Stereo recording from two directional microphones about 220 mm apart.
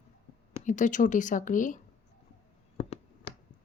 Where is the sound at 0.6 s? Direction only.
35° left (ahead or behind).